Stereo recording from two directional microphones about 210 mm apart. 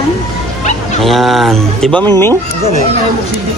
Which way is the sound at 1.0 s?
Centre (ahead or behind).